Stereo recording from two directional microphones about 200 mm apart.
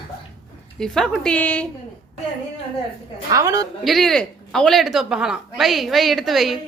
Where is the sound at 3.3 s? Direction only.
15° right (ahead or behind).